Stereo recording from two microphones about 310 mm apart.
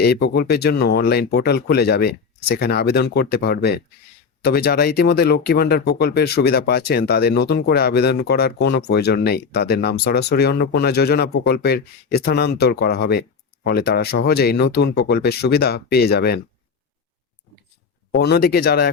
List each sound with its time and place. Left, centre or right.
0.0 s speech: left
18.2 s speech: left